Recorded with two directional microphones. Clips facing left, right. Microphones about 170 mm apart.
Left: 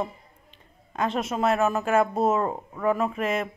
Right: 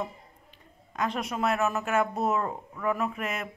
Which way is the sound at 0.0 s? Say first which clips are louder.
Left 4 dB; 25° left (ahead or behind).